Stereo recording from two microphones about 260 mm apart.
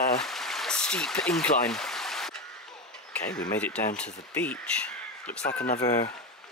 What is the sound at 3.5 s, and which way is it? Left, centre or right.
Speech, centre.